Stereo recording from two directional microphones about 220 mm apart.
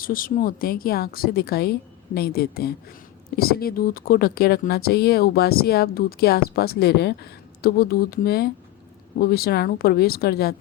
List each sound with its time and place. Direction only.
0.0 s speech: 40° left (ahead or behind)